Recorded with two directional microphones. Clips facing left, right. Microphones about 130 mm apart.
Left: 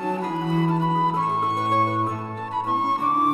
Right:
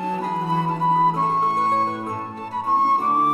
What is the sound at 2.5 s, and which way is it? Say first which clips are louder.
Music: right 4 dB; 35° right (ahead or behind).